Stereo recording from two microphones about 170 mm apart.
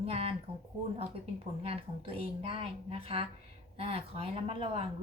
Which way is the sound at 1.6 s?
35° right (ahead or behind).